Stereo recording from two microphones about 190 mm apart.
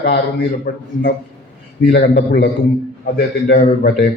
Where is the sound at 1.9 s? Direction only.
55° left (ahead or behind).